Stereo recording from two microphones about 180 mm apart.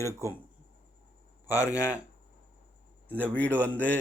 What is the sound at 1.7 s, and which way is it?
Speech, 5° right (ahead or behind).